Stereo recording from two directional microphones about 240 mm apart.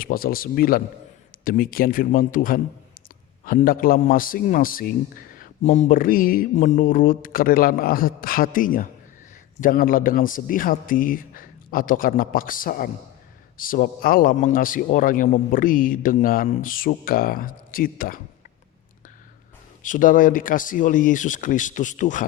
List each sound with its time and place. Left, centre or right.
0.0 s a man's voice: left
19.8 s a man's voice: left